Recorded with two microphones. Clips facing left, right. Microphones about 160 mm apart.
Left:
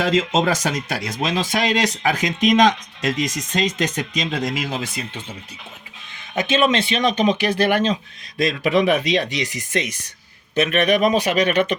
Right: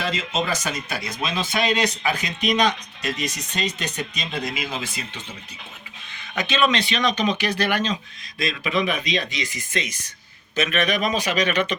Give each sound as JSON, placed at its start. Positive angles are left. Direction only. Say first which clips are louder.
{"t": 0.0, "sound": "speech", "louder": "left 7 dB", "side_deg": 90}
{"t": 4.5, "sound": "speech", "louder": "left 4 dB", "side_deg": 70}
{"t": 6.3, "sound": "a man's voice", "louder": "left 3 dB", "side_deg": 45}
{"t": 8.6, "sound": "a man's voice", "louder": "left 7 dB", "side_deg": 65}